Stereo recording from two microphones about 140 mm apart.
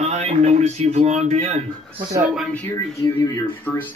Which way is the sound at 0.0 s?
55° right (ahead or behind).